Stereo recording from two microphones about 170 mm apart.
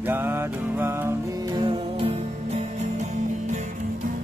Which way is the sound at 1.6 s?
35° right (ahead or behind).